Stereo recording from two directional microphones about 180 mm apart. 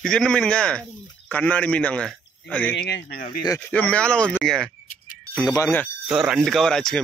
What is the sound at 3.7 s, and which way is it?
A man's voice, 5° left (ahead or behind).